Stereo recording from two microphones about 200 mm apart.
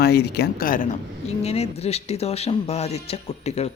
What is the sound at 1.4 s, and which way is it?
Speech, 30° left (ahead or behind).